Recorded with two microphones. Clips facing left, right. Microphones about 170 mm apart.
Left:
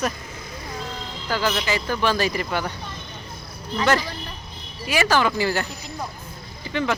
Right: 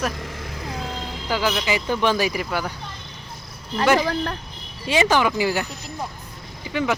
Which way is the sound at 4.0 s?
90° right.